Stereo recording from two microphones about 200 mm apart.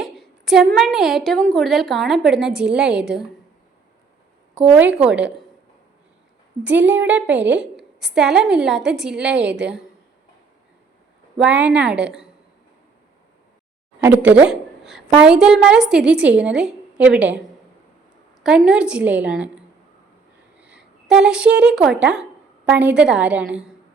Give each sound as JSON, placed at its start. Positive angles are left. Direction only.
{"t": 0.0, "sound": "a woman's voice", "side_deg": 0}
{"t": 4.5, "sound": "a woman's voice", "side_deg": -5}
{"t": 6.8, "sound": "a woman's voice", "side_deg": -65}
{"t": 7.1, "sound": "a woman's voice", "side_deg": -5}
{"t": 11.3, "sound": "a woman's voice", "side_deg": -5}
{"t": 14.0, "sound": "a woman's voice", "side_deg": -5}
{"t": 18.4, "sound": "a woman's voice", "side_deg": -5}
{"t": 20.6, "sound": "speech", "side_deg": -5}